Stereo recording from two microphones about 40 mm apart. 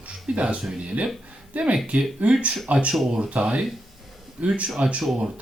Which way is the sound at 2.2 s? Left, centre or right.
Right.